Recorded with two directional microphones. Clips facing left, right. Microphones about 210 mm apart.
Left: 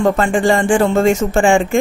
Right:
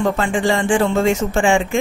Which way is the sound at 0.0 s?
50° left (ahead or behind).